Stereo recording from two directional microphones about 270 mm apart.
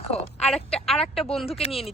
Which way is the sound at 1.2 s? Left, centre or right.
Centre.